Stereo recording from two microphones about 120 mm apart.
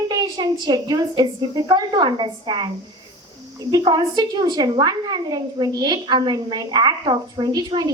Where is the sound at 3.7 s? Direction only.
35° right (ahead or behind).